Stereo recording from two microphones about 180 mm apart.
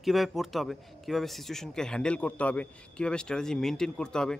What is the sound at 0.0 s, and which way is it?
A man's voice, centre (ahead or behind).